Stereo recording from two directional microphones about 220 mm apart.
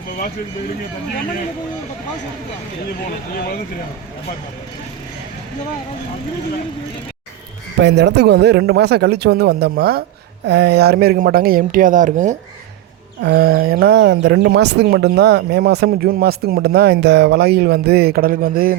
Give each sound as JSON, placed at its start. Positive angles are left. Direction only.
{"t": 7.8, "sound": "speech", "side_deg": -50}
{"t": 13.2, "sound": "speech", "side_deg": -45}